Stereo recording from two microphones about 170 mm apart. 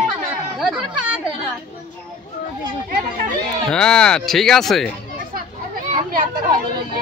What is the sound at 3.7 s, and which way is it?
Speech, 5° left (ahead or behind).